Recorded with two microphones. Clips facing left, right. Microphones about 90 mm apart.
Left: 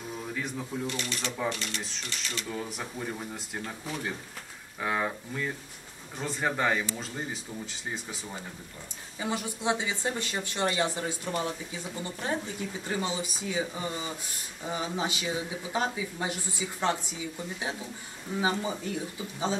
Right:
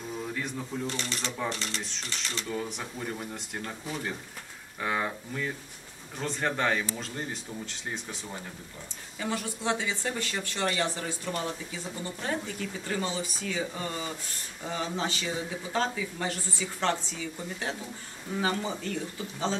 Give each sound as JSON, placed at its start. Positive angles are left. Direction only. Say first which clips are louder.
{"t": 0.3, "sound": "speech", "louder": "even", "side_deg": 0}
{"t": 0.8, "sound": "speech", "louder": "even", "side_deg": -35}
{"t": 2.5, "sound": "speech", "louder": "right 3 dB", "side_deg": 0}
{"t": 9.2, "sound": "speech", "louder": "left 1 dB", "side_deg": 15}